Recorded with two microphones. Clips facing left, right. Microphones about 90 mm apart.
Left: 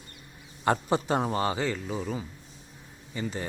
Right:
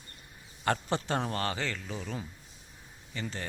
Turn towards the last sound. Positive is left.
turn(degrees=15)  # may be behind; listen again after turning